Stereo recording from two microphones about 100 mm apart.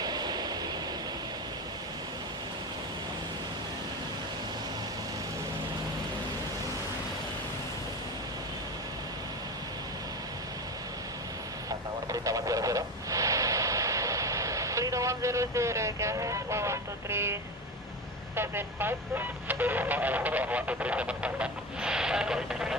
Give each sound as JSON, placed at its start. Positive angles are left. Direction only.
{"t": 0.0, "sound": "vehicle", "side_deg": -45}
{"t": 12.2, "sound": "radio", "side_deg": -35}
{"t": 18.3, "sound": "speech", "side_deg": -20}